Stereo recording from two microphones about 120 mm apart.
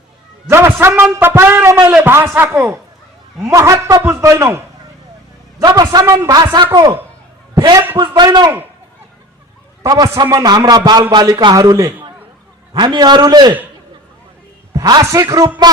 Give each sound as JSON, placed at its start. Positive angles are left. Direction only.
{"t": 0.5, "sound": "a man's voice", "side_deg": -20}
{"t": 9.8, "sound": "a man's voice", "side_deg": -30}
{"t": 12.7, "sound": "a man's voice", "side_deg": -40}
{"t": 14.7, "sound": "speech", "side_deg": -35}